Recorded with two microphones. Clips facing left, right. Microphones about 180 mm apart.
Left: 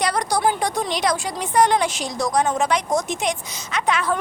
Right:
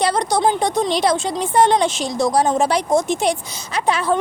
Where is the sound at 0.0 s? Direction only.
25° right (ahead or behind).